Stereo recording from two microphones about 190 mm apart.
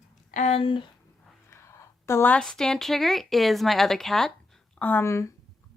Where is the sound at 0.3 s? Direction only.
40° left (ahead or behind).